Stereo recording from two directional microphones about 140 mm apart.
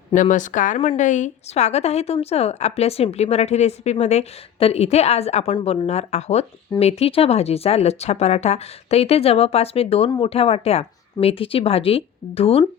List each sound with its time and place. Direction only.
0.1 s a woman's voice: 65° left (ahead or behind); by 12.6 s 45° left (ahead or behind)